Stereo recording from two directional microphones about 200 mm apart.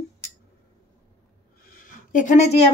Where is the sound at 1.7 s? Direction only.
40° left (ahead or behind).